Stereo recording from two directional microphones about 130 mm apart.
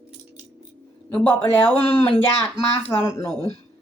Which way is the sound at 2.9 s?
20° left (ahead or behind).